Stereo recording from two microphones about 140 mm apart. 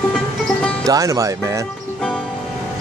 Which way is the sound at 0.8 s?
25° right (ahead or behind).